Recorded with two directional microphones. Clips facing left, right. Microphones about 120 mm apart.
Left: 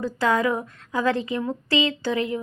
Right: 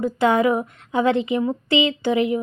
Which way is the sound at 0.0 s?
20° right (ahead or behind).